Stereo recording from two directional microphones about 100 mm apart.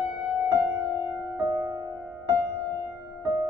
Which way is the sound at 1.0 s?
35° right (ahead or behind).